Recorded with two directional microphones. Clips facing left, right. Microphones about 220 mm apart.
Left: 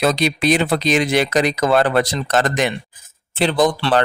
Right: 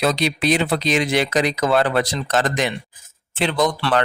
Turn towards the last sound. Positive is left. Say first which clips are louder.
# left 3 dB
turn(degrees=30)  # may be behind; listen again after turning